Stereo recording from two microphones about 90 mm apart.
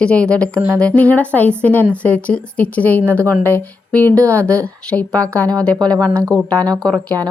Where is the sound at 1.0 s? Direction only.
15° left (ahead or behind).